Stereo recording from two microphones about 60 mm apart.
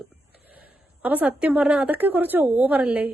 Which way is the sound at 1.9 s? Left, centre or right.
Right.